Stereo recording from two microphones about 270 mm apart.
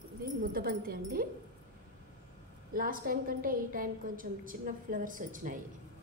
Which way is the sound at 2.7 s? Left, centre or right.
Right.